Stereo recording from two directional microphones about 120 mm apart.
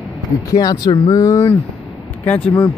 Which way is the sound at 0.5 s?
35° left (ahead or behind).